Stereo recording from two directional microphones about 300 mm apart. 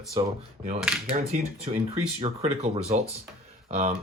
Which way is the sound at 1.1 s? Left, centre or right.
Right.